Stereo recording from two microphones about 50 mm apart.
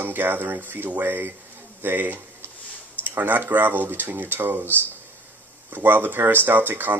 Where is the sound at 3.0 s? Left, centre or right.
Right.